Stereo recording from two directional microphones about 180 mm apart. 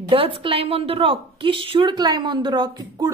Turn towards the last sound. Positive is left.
turn(degrees=-25)  # may be behind; listen again after turning